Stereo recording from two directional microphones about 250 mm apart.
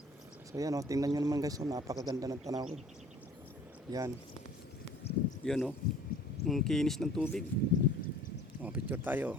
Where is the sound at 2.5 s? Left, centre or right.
Right.